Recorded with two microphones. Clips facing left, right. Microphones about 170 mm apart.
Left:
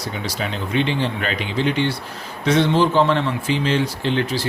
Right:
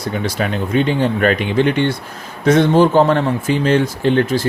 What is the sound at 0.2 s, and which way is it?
A man's voice, 55° right (ahead or behind).